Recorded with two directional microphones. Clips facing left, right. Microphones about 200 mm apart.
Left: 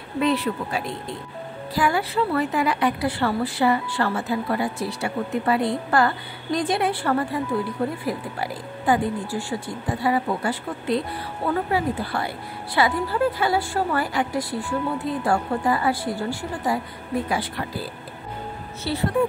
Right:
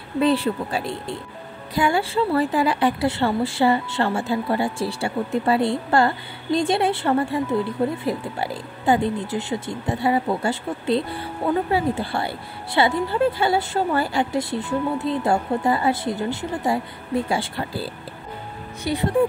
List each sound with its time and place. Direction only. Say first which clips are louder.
0.2 s a woman's voice: right 3 dB; 30° right (ahead or behind)
18.9 s speech: right 2 dB; 15° right (ahead or behind)